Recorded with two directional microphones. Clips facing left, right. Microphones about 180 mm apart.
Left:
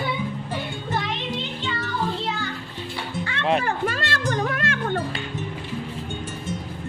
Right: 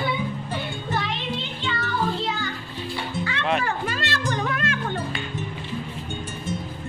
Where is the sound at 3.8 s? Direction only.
55° left (ahead or behind).